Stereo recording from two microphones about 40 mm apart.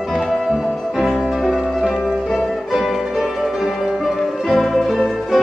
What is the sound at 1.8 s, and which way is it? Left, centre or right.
Music, centre.